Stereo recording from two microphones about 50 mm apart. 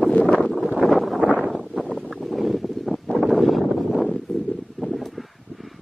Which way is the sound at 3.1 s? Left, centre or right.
Centre.